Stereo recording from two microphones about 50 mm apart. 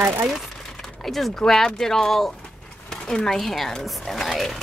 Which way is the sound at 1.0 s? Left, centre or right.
Centre.